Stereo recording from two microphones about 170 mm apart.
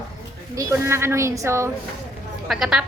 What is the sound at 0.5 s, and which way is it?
A woman's voice, 15° right (ahead or behind).